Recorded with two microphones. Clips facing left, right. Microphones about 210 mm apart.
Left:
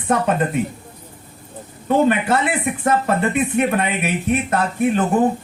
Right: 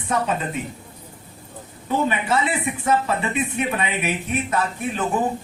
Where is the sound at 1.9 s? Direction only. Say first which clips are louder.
Left 6 dB; 55° left (ahead or behind).